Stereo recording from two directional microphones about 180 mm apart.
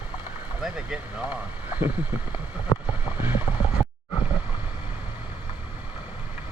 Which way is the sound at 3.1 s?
10° right (ahead or behind).